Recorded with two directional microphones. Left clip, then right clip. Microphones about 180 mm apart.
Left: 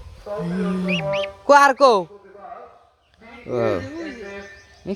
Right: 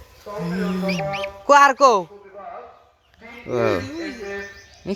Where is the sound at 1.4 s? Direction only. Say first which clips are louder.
Even; 30° left (ahead or behind).